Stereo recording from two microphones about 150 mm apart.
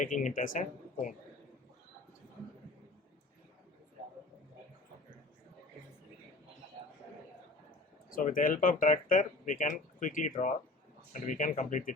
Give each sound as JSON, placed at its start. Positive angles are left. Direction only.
{"t": 0.0, "sound": "speech", "side_deg": 60}
{"t": 8.1, "sound": "speech", "side_deg": 65}